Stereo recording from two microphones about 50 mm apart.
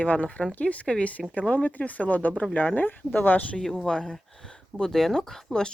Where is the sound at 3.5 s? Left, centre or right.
Centre.